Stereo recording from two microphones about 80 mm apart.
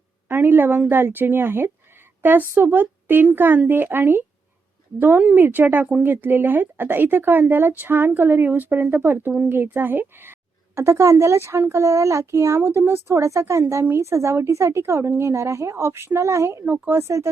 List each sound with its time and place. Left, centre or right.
0.3 s a woman's voice: right
10.8 s speech: right